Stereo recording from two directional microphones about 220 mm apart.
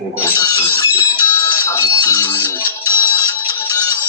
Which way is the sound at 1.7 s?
15° left (ahead or behind).